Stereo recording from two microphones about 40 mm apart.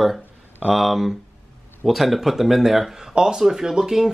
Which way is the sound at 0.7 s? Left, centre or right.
Centre.